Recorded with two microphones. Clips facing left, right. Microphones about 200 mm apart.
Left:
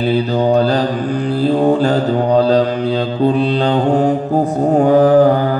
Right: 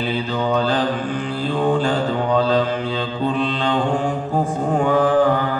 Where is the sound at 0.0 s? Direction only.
40° left (ahead or behind).